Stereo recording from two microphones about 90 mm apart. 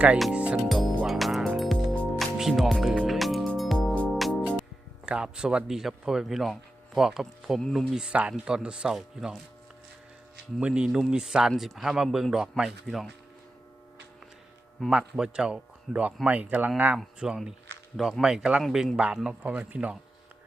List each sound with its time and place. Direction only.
0.3 s music: 15° right (ahead or behind)
1.0 s music: 5° right (ahead or behind)
5.0 s speech: 10° right (ahead or behind)
7.9 s speech: 10° right (ahead or behind)
10.6 s speech: 10° right (ahead or behind)
14.8 s speech: 5° right (ahead or behind)
19.5 s speech: 15° right (ahead or behind)